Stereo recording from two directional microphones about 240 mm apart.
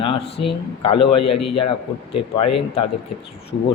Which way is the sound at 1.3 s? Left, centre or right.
Left.